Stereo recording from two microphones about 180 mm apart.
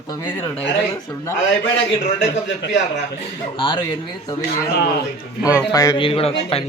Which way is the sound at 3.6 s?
30° left (ahead or behind).